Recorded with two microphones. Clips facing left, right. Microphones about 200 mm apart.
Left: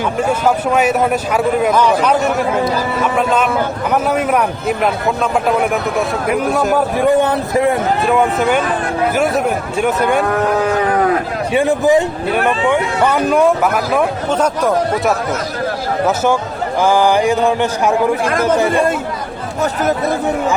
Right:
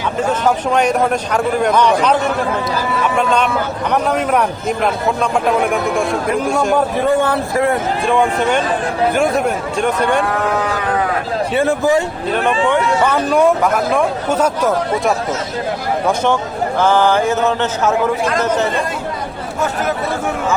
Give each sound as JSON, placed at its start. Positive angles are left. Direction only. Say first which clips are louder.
{"t": 0.3, "sound": "a man's voice", "louder": "even", "side_deg": 5}
{"t": 7.1, "sound": "speech", "louder": "left 2 dB", "side_deg": 20}
{"t": 8.0, "sound": "a man's voice", "louder": "even", "side_deg": 5}
{"t": 11.5, "sound": "a man's voice", "louder": "left 3 dB", "side_deg": 15}
{"t": 14.3, "sound": "speech", "louder": "even", "side_deg": -10}
{"t": 16.0, "sound": "a man's voice", "louder": "left 1 dB", "side_deg": 5}